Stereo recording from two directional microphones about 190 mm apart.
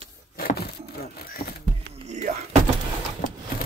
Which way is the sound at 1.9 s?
65° right (ahead or behind).